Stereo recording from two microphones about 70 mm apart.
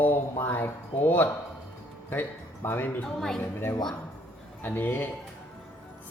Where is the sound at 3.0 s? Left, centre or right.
Centre.